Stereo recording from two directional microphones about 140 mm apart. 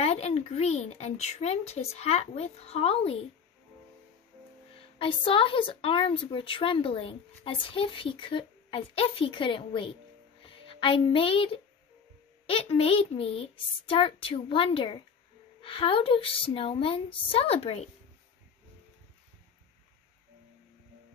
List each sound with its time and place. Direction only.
0.0 s speech: 50° left (ahead or behind)
4.7 s a woman's voice: 40° left (ahead or behind)